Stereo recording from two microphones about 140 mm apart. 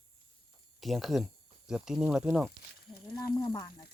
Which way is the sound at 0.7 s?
Centre (ahead or behind).